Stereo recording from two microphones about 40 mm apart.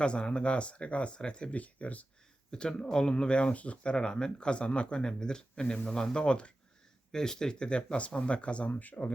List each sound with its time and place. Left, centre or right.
0.0 s speech: left
1.5 s speech: left
2.5 s speech: left
3.9 s speech: left
8.7 s speech: left